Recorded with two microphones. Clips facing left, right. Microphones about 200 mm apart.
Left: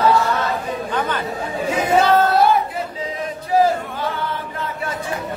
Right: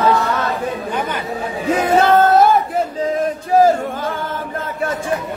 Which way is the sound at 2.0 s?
50° right (ahead or behind).